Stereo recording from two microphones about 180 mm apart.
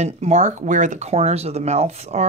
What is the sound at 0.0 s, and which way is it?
Speech, 40° right (ahead or behind).